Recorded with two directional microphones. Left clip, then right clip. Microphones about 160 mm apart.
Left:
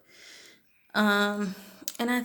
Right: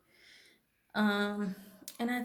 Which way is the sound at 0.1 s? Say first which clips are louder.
Left 9 dB; 25° left (ahead or behind).